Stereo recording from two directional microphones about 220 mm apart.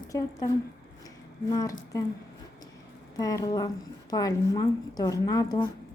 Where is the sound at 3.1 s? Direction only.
15° left (ahead or behind).